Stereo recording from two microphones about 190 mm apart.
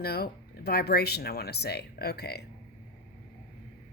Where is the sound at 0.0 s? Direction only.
55° left (ahead or behind).